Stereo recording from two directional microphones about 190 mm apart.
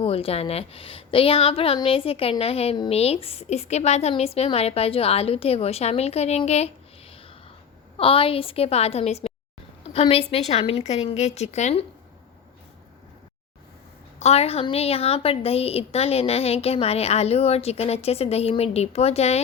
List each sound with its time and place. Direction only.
0.0 s a woman's voice: 30° left (ahead or behind)
7.1 s a sound: 30° left (ahead or behind)
7.9 s a woman's voice: 30° left (ahead or behind)
14.2 s a woman's voice: 35° left (ahead or behind)